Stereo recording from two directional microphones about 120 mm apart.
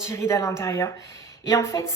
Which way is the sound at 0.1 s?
25° left (ahead or behind).